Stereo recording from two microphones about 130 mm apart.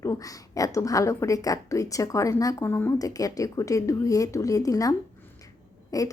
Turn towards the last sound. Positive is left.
turn(degrees=30)  # may be behind; listen again after turning